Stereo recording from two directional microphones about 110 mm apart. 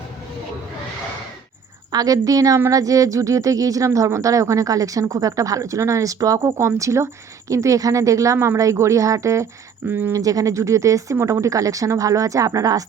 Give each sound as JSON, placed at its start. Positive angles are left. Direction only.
{"t": 1.9, "sound": "a woman's voice", "side_deg": -35}